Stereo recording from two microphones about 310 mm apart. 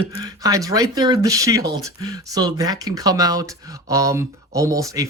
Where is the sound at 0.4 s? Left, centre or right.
Centre.